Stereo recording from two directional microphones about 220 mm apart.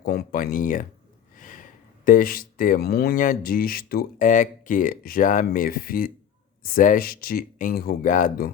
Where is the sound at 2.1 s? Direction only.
40° left (ahead or behind).